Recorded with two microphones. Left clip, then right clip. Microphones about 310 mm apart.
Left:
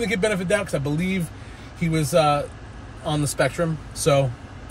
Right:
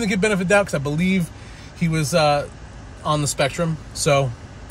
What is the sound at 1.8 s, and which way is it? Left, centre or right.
Speech, centre.